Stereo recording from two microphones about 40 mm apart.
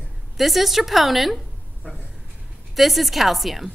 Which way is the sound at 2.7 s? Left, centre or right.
Centre.